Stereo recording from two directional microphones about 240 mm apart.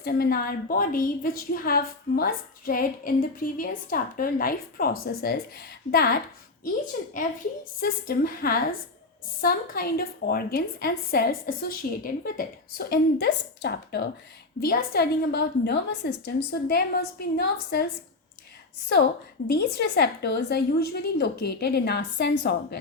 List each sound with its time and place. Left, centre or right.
0.0 s a woman's voice: left
19.5 s a woman's voice: left